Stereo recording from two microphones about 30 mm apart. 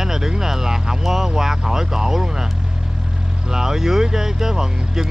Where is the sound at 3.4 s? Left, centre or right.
Centre.